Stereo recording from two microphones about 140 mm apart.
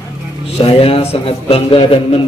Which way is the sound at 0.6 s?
40° left (ahead or behind).